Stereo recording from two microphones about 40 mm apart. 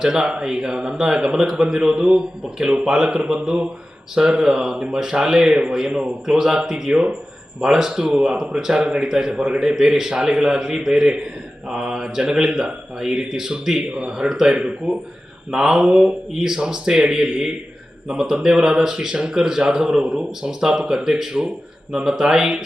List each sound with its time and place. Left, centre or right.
0.0 s speech: centre
14.5 s speech: right
15.4 s speech: centre